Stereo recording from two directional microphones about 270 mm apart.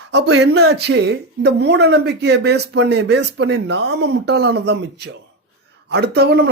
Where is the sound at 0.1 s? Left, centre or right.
Right.